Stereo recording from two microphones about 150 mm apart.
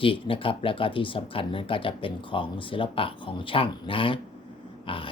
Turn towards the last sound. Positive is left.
turn(degrees=35)  # may be behind; listen again after turning